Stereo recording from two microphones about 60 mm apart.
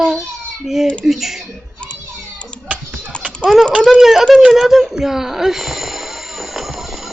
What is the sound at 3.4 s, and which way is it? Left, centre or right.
Speech, centre.